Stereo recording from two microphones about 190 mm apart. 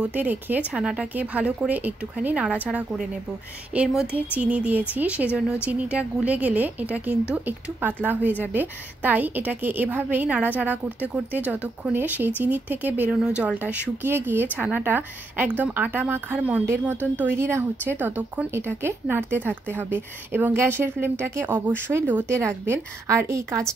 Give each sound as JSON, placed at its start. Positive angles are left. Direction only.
{"t": 0.0, "sound": "a woman's voice", "side_deg": -10}